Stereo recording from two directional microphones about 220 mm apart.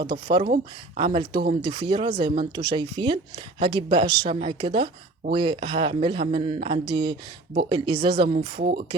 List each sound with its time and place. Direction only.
0.0 s speech: 20° right (ahead or behind)
8.6 s speech: 40° right (ahead or behind)